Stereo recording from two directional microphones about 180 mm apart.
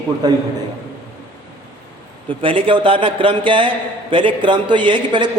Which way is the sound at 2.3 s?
30° right (ahead or behind).